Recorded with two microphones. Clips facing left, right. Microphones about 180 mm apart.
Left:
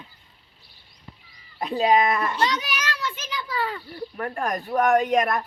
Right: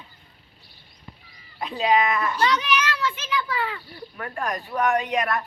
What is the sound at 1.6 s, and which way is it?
A child's voice, 45° left (ahead or behind).